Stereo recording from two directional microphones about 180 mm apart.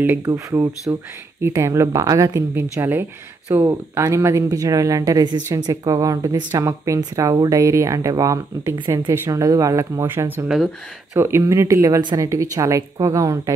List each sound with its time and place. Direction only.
0.0 s speech: 10° right (ahead or behind)